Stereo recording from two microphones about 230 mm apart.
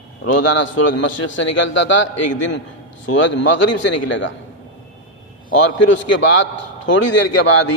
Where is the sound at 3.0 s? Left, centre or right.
Left.